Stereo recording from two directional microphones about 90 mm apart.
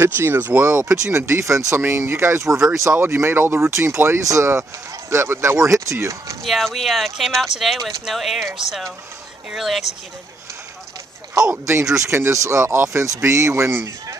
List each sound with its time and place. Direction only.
0.0 s speech: 25° right (ahead or behind)
0.7 s speech: 35° right (ahead or behind)
6.4 s speech: centre (ahead or behind)
11.5 s speech: 30° right (ahead or behind)